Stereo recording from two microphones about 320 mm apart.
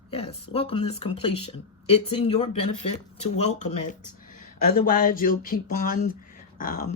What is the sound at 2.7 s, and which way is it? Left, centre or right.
Speech, left.